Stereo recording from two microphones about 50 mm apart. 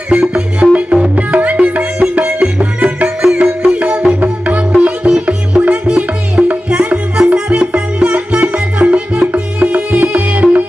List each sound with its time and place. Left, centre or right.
0.1 s music: right